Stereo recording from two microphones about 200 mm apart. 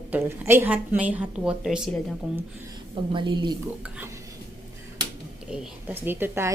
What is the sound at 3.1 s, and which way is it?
Speech, 25° right (ahead or behind).